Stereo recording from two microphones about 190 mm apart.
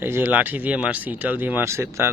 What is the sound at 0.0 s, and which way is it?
Speech, 10° right (ahead or behind).